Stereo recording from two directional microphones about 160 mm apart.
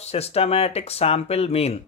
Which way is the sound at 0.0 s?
40° left (ahead or behind).